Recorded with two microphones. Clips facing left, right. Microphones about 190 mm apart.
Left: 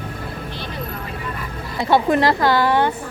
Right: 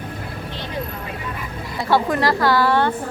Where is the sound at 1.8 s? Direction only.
20° left (ahead or behind).